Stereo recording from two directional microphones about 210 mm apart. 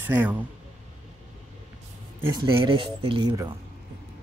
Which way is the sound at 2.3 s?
15° right (ahead or behind).